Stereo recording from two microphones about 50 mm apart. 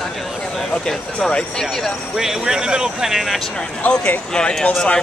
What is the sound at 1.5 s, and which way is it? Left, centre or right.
Speech, centre.